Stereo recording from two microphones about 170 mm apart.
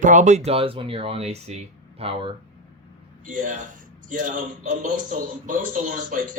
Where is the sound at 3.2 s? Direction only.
50° right (ahead or behind).